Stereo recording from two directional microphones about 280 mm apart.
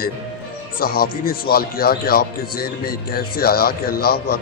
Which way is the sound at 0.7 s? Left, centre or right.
Left.